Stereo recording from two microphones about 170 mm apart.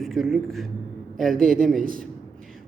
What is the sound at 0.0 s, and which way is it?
Speech, centre (ahead or behind).